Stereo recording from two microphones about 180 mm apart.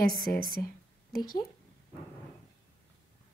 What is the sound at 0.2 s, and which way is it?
Speech, 55° left (ahead or behind).